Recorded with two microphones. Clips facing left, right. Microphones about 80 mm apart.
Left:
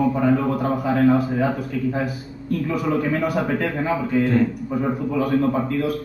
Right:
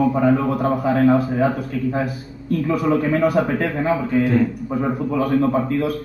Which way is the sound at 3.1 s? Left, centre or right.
Right.